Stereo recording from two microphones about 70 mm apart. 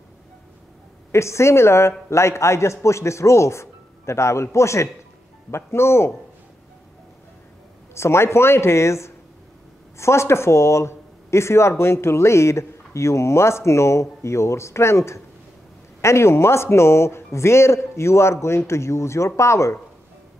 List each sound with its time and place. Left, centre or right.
1.1 s a man's voice: left
7.9 s a man's voice: left